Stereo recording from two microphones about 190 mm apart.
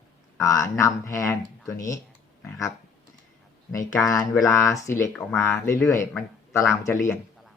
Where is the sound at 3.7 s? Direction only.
15° left (ahead or behind).